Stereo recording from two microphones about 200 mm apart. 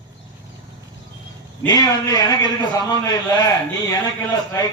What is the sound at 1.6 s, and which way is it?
A man's voice, 20° left (ahead or behind).